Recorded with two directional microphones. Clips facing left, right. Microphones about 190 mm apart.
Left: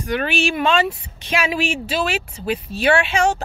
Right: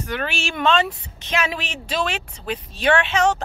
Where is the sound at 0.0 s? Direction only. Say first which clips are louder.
Left 6 dB; 15° left (ahead or behind).